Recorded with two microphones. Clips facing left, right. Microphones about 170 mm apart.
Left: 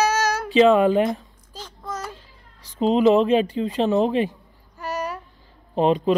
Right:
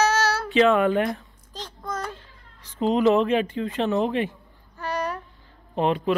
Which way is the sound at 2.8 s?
25° left (ahead or behind).